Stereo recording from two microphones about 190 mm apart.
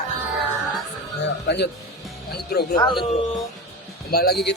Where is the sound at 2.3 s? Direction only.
55° left (ahead or behind).